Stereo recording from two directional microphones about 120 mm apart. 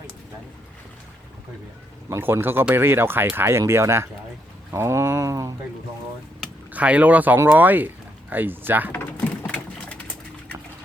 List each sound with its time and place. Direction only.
2.0 s speech: 20° right (ahead or behind)
6.7 s speech: 10° right (ahead or behind)
9.5 s a sound: 10° left (ahead or behind)